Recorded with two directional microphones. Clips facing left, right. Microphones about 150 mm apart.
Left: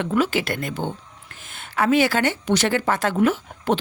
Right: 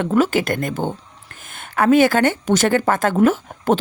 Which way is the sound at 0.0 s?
45° right (ahead or behind).